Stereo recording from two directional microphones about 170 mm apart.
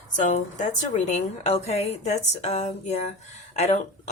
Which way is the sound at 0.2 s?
45° left (ahead or behind).